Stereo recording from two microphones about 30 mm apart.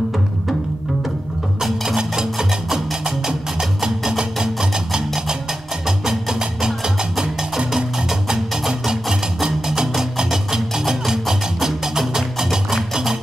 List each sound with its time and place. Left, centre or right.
2.0 s music: right